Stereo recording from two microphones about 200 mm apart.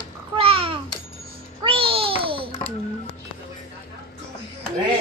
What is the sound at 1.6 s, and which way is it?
Babbling, 25° right (ahead or behind).